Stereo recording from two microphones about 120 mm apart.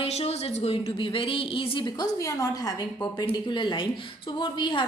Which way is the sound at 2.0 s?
25° left (ahead or behind).